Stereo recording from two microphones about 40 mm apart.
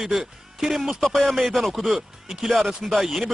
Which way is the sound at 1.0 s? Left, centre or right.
Centre.